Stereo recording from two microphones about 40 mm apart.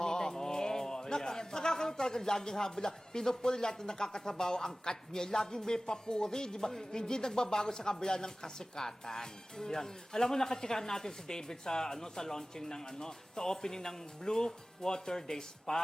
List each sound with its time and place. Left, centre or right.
0.0 s a man's voice: centre